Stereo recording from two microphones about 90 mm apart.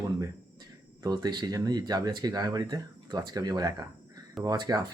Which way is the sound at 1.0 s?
50° right (ahead or behind).